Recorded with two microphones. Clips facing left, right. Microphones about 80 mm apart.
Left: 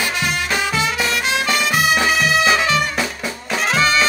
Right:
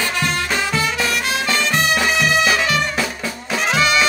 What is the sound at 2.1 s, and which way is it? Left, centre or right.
Music, centre.